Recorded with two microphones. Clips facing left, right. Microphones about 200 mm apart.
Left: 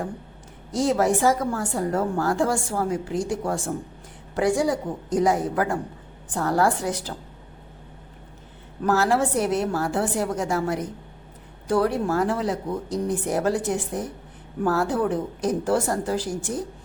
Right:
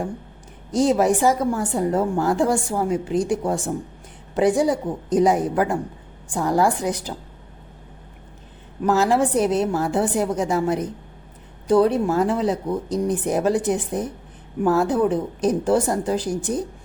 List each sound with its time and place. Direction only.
0.7 s a woman's voice: 20° right (ahead or behind)
8.8 s a woman's voice: 15° right (ahead or behind)